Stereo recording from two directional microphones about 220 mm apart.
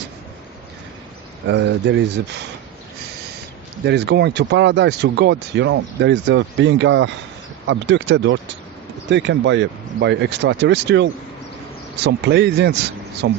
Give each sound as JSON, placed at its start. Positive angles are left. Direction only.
{"t": 1.5, "sound": "speech", "side_deg": -55}
{"t": 3.8, "sound": "speech", "side_deg": -50}